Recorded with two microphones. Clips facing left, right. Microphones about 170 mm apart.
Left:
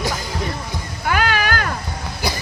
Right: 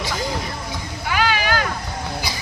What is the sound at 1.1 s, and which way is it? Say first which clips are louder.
Vehicle: left 1 dB; 50° left (ahead or behind).